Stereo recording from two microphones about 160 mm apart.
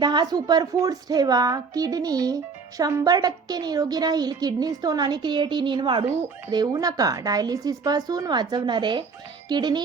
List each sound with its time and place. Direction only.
0.0 s a woman's voice: 25° right (ahead or behind)